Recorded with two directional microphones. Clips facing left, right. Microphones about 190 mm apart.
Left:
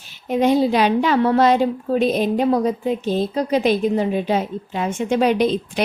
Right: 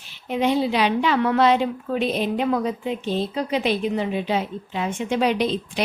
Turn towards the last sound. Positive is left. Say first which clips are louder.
# left 4 dB
turn(degrees=50)  # may be behind; listen again after turning